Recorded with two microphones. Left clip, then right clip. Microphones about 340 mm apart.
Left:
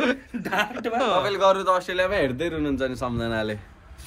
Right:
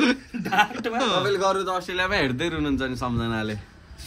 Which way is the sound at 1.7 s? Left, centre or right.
Centre.